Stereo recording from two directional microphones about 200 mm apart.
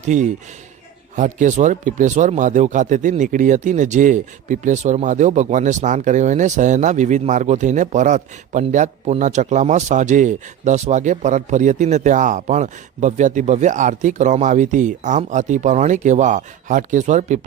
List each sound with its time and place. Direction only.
0.1 s speech: 35° right (ahead or behind)